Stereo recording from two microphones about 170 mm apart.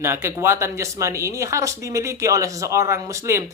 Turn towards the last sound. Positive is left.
turn(degrees=-15)  # may be behind; listen again after turning